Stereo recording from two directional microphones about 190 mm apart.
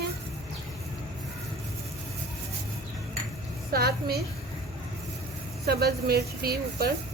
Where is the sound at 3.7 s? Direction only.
55° right (ahead or behind).